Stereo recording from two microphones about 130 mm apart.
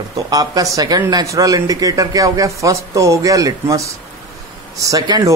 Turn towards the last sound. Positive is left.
turn(degrees=-30)  # may be behind; listen again after turning